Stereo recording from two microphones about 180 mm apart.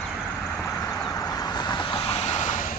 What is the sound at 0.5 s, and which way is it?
Vehicle, 5° left (ahead or behind).